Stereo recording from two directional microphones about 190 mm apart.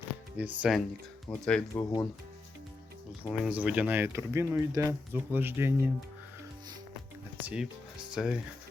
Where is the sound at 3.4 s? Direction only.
5° right (ahead or behind).